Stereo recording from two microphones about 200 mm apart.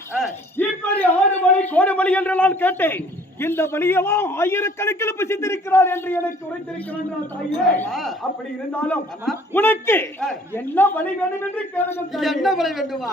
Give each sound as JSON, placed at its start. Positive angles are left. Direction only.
{"t": 0.5, "sound": "a man's voice", "side_deg": 10}
{"t": 7.8, "sound": "a woman's voice", "side_deg": 0}
{"t": 12.1, "sound": "a woman's voice", "side_deg": 0}